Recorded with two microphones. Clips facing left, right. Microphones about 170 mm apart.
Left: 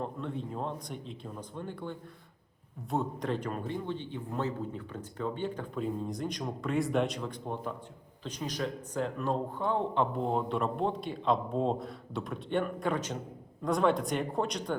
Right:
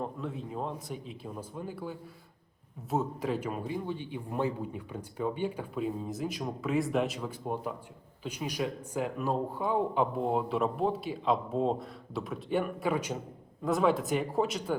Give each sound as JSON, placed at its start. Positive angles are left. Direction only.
{"t": 0.0, "sound": "speech", "side_deg": -5}